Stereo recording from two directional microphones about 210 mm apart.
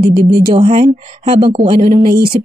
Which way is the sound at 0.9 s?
25° right (ahead or behind).